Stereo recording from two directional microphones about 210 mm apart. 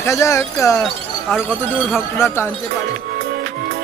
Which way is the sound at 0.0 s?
15° left (ahead or behind).